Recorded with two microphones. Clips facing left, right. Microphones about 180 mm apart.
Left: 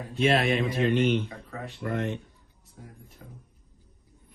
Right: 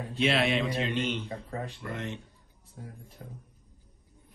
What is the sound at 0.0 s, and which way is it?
Speech, 50° left (ahead or behind).